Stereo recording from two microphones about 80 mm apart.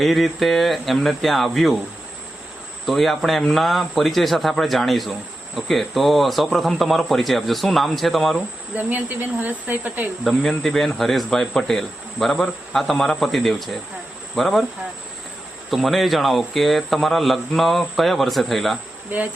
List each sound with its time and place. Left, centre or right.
0.0 s speech: centre
2.8 s speech: centre
8.7 s speech: right
10.5 s speech: centre
15.7 s speech: centre